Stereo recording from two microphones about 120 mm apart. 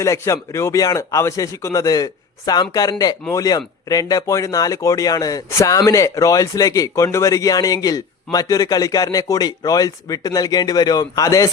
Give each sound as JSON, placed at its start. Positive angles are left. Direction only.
{"t": 0.0, "sound": "speech", "side_deg": 25}